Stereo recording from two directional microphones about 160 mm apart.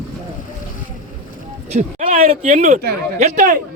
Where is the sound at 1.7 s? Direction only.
50° right (ahead or behind).